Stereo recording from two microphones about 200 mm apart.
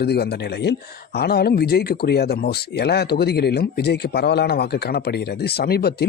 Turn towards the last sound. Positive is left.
turn(degrees=50)  # may be behind; listen again after turning